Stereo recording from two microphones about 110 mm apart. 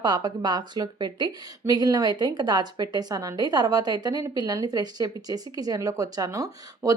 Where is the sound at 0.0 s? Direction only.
40° right (ahead or behind).